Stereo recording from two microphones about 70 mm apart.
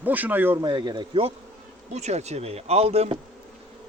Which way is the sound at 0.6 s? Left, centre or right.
Right.